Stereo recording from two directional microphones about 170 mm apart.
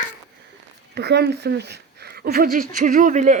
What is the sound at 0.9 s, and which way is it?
Speech, 80° right.